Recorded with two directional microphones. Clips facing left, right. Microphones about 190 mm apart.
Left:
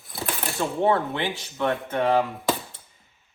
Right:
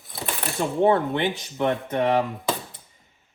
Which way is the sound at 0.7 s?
20° right (ahead or behind).